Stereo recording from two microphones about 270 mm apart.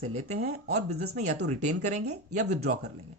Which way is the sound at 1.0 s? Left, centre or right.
Right.